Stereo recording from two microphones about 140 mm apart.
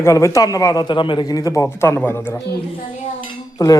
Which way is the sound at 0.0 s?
20° left (ahead or behind).